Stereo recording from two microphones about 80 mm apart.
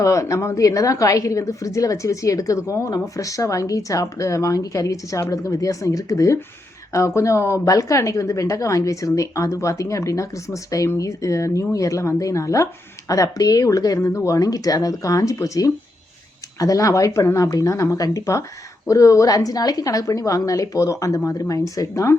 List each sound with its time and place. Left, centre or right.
0.0 s speech: left